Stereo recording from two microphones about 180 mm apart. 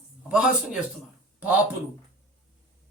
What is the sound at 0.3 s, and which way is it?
Speech, 5° right (ahead or behind).